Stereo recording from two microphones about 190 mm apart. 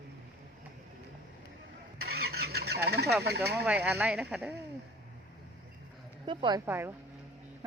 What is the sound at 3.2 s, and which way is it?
Speech, 60° right (ahead or behind).